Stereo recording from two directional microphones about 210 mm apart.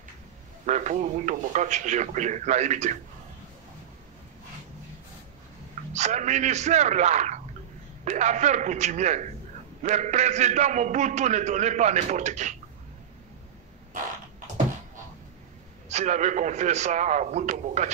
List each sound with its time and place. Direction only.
0.7 s a man's voice: 35° right (ahead or behind)
5.9 s a man's voice: 35° right (ahead or behind)
15.9 s a man's voice: 35° right (ahead or behind)